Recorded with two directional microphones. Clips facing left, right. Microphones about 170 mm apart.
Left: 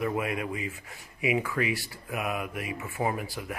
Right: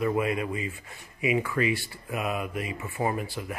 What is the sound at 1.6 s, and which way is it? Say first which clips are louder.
Speech: right 3 dB; 90° left.